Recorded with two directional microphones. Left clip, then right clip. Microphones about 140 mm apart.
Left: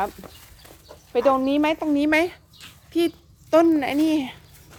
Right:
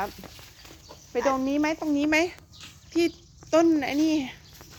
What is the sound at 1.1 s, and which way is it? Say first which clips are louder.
Speech: left 6 dB; 25° left (ahead or behind).